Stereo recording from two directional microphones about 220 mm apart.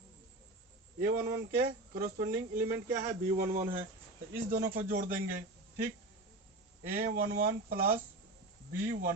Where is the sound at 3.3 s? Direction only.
40° right (ahead or behind).